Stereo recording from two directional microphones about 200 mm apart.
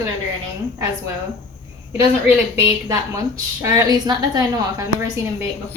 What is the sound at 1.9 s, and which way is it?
A woman's voice, 15° right (ahead or behind).